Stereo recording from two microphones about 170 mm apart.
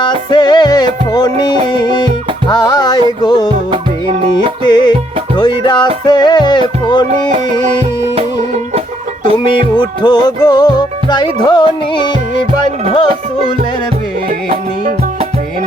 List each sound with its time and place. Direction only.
0.0 s music: 25° left (ahead or behind)
4.6 s music: 25° left (ahead or behind)
7.1 s music: 45° right (ahead or behind)
9.5 s music: 30° left (ahead or behind)